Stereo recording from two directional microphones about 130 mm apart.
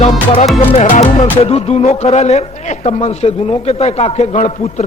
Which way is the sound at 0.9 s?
65° left (ahead or behind).